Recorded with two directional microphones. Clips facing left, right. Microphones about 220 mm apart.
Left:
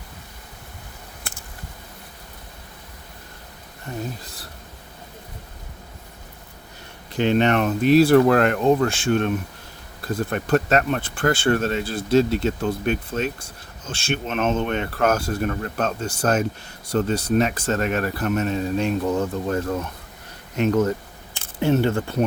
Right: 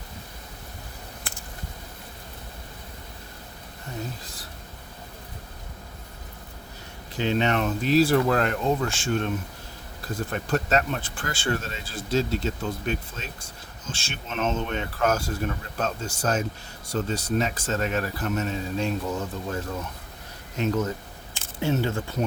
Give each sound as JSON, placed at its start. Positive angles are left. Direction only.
{"t": 7.2, "sound": "speech", "side_deg": 60}
{"t": 10.3, "sound": "speech", "side_deg": 60}
{"t": 20.6, "sound": "speech", "side_deg": 55}